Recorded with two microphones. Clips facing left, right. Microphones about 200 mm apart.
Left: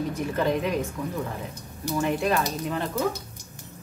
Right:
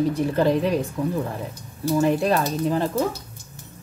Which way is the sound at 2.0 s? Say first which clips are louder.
Right 3 dB; 35° right (ahead or behind).